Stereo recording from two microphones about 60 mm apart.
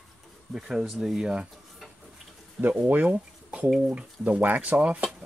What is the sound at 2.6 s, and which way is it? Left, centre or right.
Speech, right.